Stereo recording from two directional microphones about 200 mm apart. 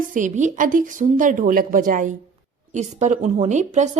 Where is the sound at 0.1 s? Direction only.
40° right (ahead or behind).